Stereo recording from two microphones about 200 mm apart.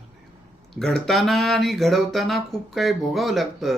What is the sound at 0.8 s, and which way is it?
Speech, centre (ahead or behind).